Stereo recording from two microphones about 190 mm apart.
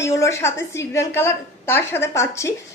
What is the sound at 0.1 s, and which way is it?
A woman's voice, 15° left (ahead or behind).